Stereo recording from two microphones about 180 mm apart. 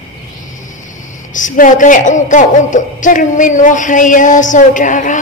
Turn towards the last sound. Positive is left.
turn(degrees=45)  # may be behind; listen again after turning